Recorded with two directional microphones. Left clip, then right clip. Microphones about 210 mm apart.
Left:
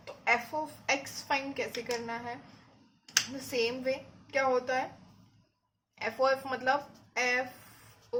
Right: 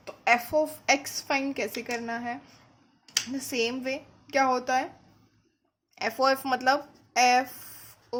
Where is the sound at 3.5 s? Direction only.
55° right (ahead or behind).